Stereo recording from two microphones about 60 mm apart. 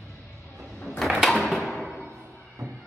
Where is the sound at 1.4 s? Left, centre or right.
Centre.